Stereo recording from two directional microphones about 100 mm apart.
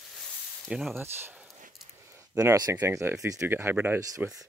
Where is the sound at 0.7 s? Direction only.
5° right (ahead or behind).